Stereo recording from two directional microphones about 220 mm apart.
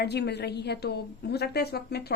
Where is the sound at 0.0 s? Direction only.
50° left (ahead or behind).